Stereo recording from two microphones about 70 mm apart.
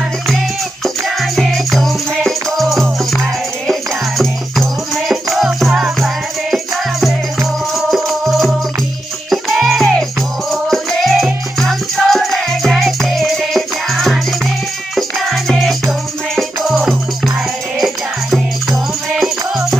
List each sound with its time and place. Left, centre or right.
0.8 s music: centre
4.2 s music: centre
17.7 s music: centre